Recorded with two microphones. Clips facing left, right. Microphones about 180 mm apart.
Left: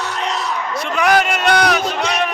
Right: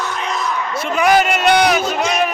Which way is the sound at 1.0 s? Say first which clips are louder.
Right 2 dB; 5° right (ahead or behind).